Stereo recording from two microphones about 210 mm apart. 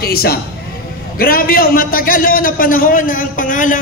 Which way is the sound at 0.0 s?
45° left (ahead or behind).